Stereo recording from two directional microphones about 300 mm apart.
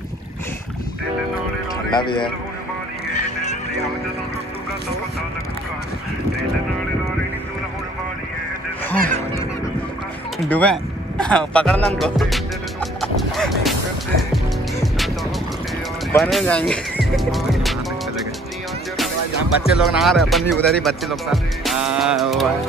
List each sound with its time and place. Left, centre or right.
1.9 s speech: centre
10.4 s speech: centre
13.0 s music: centre
16.1 s speech: centre
19.5 s speech: left
19.8 s speech: centre